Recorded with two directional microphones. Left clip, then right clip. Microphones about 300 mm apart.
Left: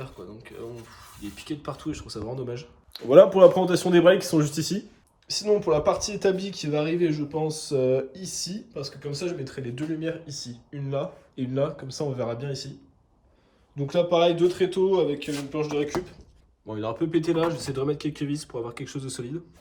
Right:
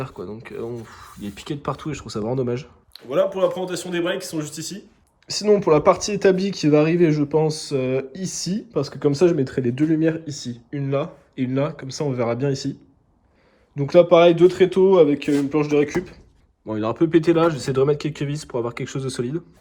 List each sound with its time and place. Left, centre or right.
0.0 s speech: centre
13.7 s speech: centre